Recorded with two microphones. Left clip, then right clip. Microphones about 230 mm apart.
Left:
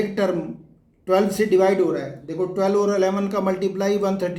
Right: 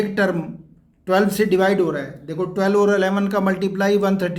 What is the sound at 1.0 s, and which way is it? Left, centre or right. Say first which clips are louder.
Speech: right 1 dB; right.